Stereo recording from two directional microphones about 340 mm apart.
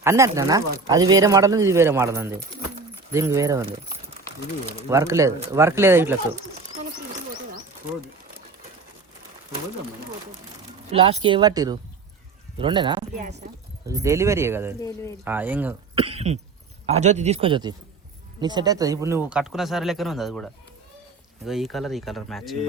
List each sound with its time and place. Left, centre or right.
0.0 s speech: centre
4.9 s speech: centre
10.9 s speech: centre
13.1 s speech: right
13.8 s speech: centre
14.8 s speech: centre
15.2 s speech: centre
16.0 s cough: centre
16.8 s speech: centre